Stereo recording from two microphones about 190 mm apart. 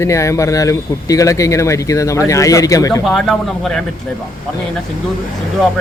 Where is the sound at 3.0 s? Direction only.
Centre (ahead or behind).